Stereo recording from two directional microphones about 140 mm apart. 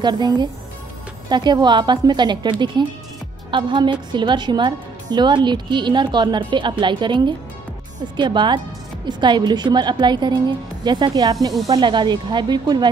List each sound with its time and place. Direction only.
0.0 s a woman's voice: 30° right (ahead or behind)